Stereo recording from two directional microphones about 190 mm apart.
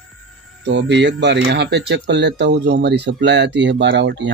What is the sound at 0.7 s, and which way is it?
Speech, 70° right (ahead or behind).